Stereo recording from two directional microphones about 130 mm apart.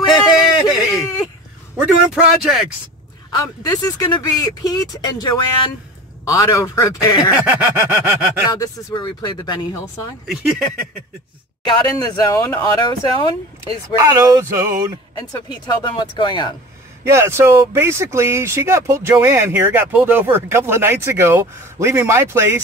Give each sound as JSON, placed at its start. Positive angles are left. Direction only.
{"t": 0.1, "sound": "a sound", "side_deg": -5}
{"t": 1.8, "sound": "speech", "side_deg": -5}
{"t": 3.3, "sound": "speech", "side_deg": 25}
{"t": 7.9, "sound": "a sound", "side_deg": -15}
{"t": 8.5, "sound": "speech", "side_deg": 35}
{"t": 10.2, "sound": "speech", "side_deg": 0}
{"t": 11.6, "sound": "speech", "side_deg": 30}
{"t": 13.9, "sound": "speech", "side_deg": -25}
{"t": 15.5, "sound": "speech", "side_deg": 35}
{"t": 17.1, "sound": "speech", "side_deg": -20}